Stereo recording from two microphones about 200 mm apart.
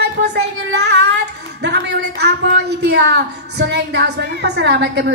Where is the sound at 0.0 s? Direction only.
60° right (ahead or behind).